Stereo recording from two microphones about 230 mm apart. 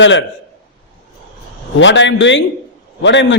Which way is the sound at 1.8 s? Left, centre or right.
Left.